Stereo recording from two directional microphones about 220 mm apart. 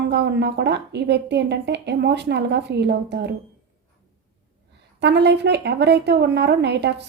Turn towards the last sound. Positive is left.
turn(degrees=-50)  # may be behind; listen again after turning